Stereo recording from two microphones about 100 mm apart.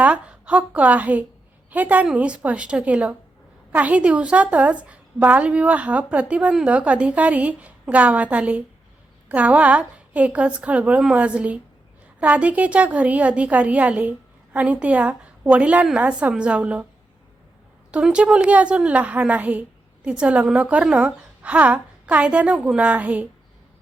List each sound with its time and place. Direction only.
0.0 s a woman's voice: 10° right (ahead or behind)
17.9 s a woman's voice: 10° right (ahead or behind)